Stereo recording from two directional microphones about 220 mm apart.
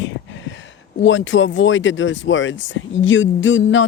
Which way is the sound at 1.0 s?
60° left (ahead or behind).